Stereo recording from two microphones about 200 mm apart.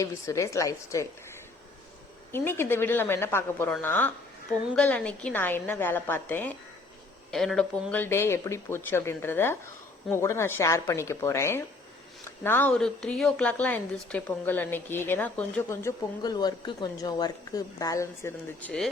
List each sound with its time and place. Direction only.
0.0 s a woman's voice: 15° left (ahead or behind)
2.3 s a woman's voice: 10° left (ahead or behind)